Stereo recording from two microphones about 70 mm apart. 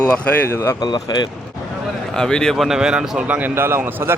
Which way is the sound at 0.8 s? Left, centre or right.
Left.